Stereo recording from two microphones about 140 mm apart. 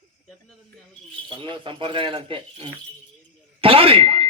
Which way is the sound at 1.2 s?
35° right (ahead or behind).